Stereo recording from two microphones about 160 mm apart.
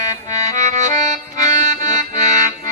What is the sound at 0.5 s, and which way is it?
Music, 50° right (ahead or behind).